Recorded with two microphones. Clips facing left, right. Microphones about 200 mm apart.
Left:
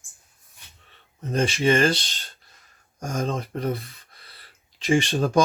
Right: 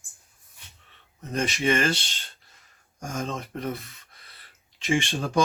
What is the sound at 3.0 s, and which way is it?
Speech, 35° left (ahead or behind).